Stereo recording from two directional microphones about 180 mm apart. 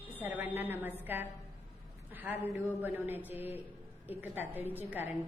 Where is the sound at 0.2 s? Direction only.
10° right (ahead or behind).